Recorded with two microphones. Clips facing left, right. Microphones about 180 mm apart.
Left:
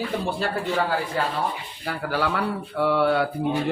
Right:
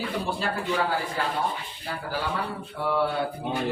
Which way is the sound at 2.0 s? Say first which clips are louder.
Left 6 dB; 75° left (ahead or behind).